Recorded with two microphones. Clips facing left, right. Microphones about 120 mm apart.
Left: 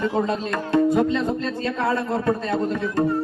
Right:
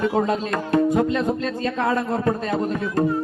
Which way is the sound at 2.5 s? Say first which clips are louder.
Even; 40° right (ahead or behind).